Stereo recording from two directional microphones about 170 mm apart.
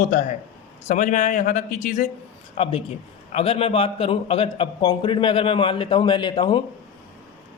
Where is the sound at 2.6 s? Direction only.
35° left (ahead or behind).